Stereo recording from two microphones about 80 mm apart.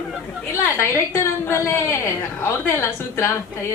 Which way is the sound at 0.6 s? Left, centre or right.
Left.